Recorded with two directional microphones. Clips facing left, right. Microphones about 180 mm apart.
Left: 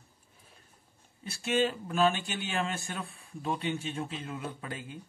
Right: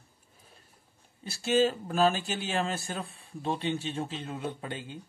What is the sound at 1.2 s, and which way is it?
Speech, 35° right (ahead or behind).